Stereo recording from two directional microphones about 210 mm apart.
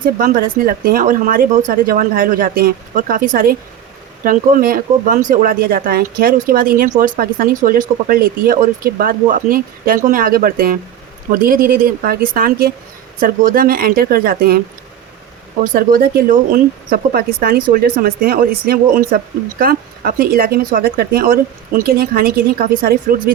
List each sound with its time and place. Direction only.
0.0 s speech: 40° right (ahead or behind)
15.6 s speech: 40° right (ahead or behind)